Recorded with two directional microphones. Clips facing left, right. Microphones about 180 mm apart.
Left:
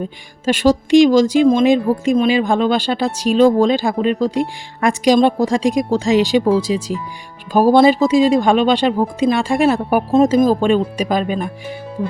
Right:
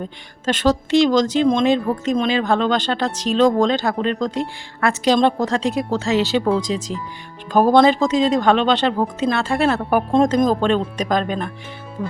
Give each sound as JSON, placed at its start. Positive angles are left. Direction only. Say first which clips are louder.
{"t": 0.0, "sound": "speech", "louder": "left 4 dB", "side_deg": 10}